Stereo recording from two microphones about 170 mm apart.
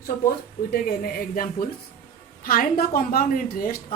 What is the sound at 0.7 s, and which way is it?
Speech, 60° left (ahead or behind).